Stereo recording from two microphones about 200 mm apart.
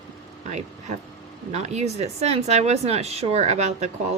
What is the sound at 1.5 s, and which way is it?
Speech, 35° right (ahead or behind).